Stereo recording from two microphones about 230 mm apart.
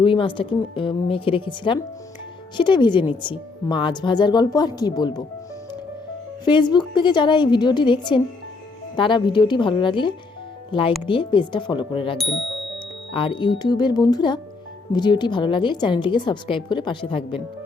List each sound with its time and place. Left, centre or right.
0.0 s a woman's voice: left
6.4 s a woman's voice: centre
13.1 s a woman's voice: left